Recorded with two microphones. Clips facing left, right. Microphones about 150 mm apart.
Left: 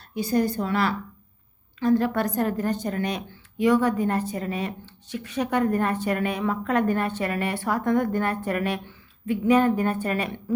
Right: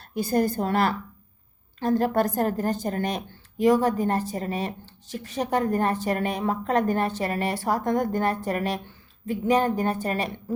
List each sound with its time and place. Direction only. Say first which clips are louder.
0.1 s a woman's voice: even; 50° right (ahead or behind)